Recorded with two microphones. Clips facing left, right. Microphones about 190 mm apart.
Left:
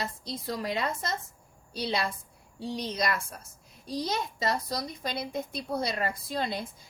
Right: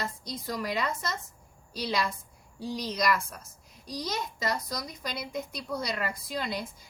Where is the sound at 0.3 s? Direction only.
25° left (ahead or behind).